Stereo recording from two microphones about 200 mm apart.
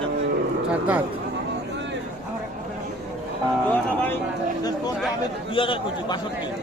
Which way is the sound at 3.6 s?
10° left (ahead or behind).